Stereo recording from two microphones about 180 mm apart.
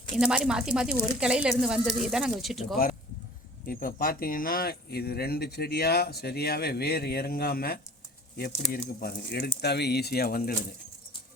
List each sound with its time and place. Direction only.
0.2 s speech: 5° right (ahead or behind)
3.7 s speech: 55° left (ahead or behind)